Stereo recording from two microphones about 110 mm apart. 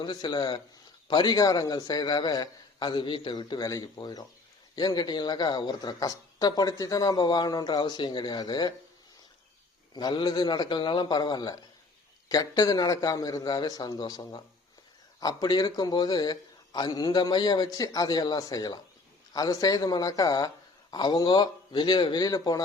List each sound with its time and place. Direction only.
0.0 s a woman's voice: 40° left (ahead or behind)
9.9 s a woman's voice: 40° left (ahead or behind)